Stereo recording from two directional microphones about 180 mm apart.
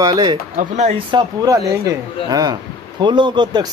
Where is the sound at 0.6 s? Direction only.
40° right (ahead or behind).